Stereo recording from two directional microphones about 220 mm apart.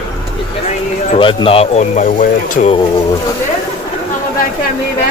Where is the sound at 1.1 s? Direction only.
25° left (ahead or behind).